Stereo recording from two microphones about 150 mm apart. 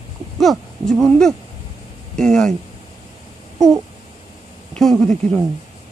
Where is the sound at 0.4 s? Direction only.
Centre (ahead or behind).